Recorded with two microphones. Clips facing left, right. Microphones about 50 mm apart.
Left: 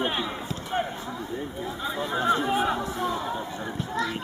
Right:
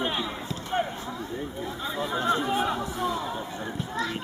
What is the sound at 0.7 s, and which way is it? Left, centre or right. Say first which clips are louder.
Clip-clop: right 1 dB; centre.